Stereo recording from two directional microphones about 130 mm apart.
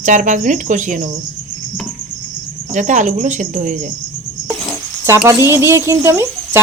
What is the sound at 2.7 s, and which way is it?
Speech, 70° right (ahead or behind).